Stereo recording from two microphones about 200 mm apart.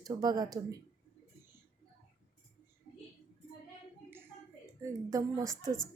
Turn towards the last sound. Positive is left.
turn(degrees=-15)  # may be behind; listen again after turning